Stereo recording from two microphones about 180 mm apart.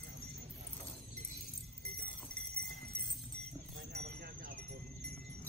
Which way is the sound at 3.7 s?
60° right (ahead or behind).